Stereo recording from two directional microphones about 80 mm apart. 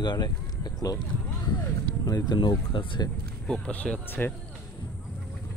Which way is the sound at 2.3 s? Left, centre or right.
Left.